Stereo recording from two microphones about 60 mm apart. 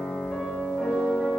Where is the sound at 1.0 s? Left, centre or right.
Centre.